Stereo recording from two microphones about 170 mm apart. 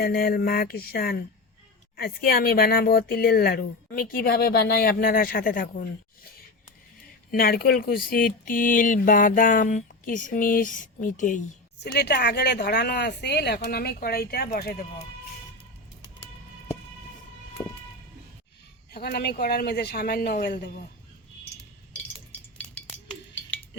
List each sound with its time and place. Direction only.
0.0 s speech: 60° left (ahead or behind)
7.3 s speech: 60° left (ahead or behind)
11.8 s speech: 75° left (ahead or behind)
17.6 s a sound: 15° left (ahead or behind)
18.9 s speech: 70° left (ahead or behind)
22.0 s chink: 10° left (ahead or behind)